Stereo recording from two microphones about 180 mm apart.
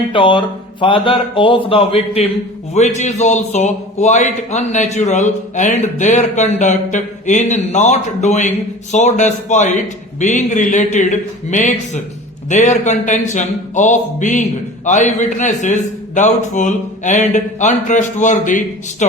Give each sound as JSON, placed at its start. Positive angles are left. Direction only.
{"t": 0.1, "sound": "a man's voice", "side_deg": 30}